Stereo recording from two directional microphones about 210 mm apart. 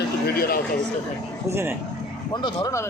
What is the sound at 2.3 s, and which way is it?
Speech, 20° left (ahead or behind).